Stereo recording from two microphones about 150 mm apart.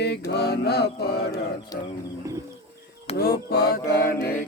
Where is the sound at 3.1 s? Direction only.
90° left.